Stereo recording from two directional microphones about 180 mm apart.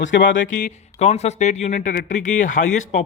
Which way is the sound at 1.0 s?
35° left (ahead or behind).